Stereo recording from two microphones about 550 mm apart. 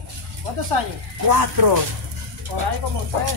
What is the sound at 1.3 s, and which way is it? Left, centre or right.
Speech, right.